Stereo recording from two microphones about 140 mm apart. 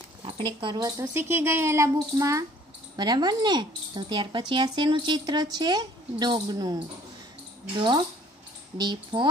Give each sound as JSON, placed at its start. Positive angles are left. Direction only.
{"t": 0.2, "sound": "speech", "side_deg": -35}
{"t": 1.1, "sound": "speech", "side_deg": -15}
{"t": 8.7, "sound": "speech", "side_deg": -30}